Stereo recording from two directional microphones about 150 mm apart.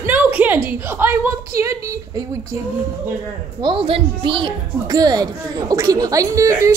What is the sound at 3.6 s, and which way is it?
A woman's voice, 35° right (ahead or behind).